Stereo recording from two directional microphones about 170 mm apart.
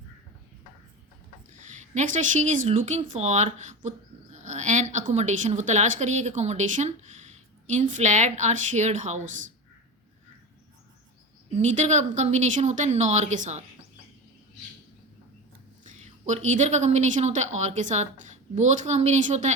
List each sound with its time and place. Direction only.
1.5 s speech: 45° right (ahead or behind)
11.5 s speech: 45° right (ahead or behind)
15.8 s a woman's voice: 45° right (ahead or behind)